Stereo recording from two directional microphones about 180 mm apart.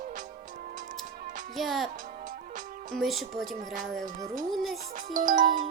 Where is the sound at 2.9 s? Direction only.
Centre (ahead or behind).